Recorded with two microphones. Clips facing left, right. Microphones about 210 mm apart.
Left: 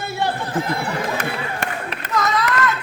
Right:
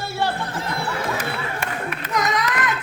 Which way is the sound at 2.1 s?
15° right (ahead or behind).